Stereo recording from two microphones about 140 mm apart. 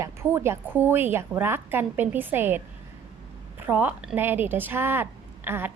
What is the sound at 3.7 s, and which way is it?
A woman's voice, 15° right (ahead or behind).